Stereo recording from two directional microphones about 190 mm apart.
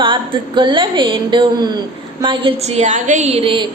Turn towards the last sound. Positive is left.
turn(degrees=-30)  # may be behind; listen again after turning